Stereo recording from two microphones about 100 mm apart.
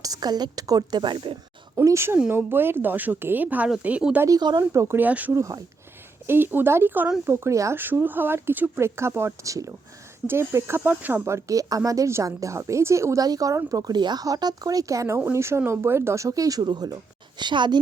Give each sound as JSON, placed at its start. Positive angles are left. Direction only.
{"t": 0.0, "sound": "a woman's voice", "side_deg": -40}
{"t": 1.7, "sound": "speech", "side_deg": -30}
{"t": 4.3, "sound": "a woman's voice", "side_deg": -45}
{"t": 4.7, "sound": "speech", "side_deg": -30}
{"t": 4.9, "sound": "speech", "side_deg": -15}
{"t": 5.3, "sound": "speech", "side_deg": -30}